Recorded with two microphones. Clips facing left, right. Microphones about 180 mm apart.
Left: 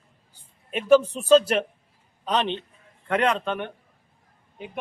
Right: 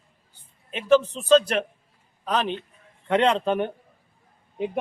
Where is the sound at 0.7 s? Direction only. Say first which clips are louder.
Left 2 dB; 10° left (ahead or behind).